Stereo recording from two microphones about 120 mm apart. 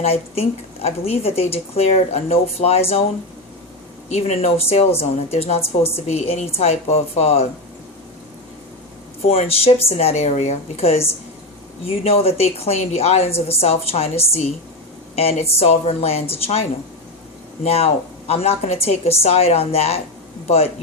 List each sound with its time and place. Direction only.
0.0 s a woman's voice: 55° left (ahead or behind)
4.1 s a woman's voice: 60° left (ahead or behind)
9.2 s a woman's voice: 55° left (ahead or behind)